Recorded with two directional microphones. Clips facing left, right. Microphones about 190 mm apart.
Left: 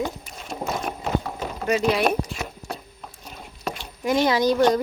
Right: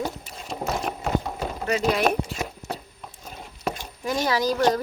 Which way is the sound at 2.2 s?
30° right (ahead or behind).